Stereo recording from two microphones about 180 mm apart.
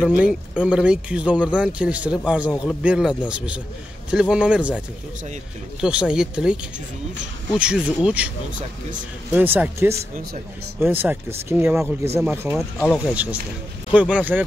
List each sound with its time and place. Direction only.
0.0 s speech: 5° right (ahead or behind)
9.3 s speech: 10° right (ahead or behind)
9.9 s speech: 50° right (ahead or behind)
10.8 s speech: 10° right (ahead or behind)